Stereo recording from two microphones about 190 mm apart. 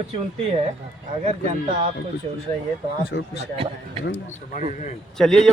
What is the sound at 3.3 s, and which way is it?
Speech, 30° right (ahead or behind).